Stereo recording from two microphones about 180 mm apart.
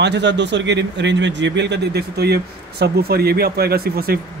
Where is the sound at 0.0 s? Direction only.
75° right (ahead or behind).